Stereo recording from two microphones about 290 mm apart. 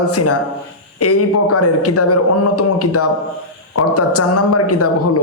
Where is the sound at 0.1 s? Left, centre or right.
Left.